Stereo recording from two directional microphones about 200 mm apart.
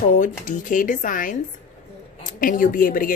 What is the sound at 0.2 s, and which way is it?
Speech, 40° left (ahead or behind).